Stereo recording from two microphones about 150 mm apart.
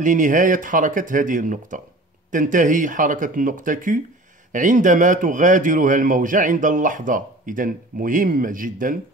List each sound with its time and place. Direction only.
0.0 s speech: 60° right (ahead or behind)